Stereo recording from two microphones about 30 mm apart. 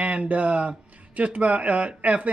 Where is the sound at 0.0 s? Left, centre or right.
Right.